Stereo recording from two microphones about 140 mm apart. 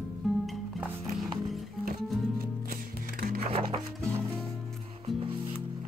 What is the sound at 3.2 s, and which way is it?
Music, 90° right.